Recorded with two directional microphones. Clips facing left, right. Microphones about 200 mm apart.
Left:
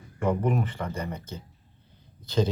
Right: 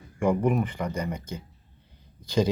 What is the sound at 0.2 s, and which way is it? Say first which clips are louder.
Speech: right 2 dB; 10° right (ahead or behind).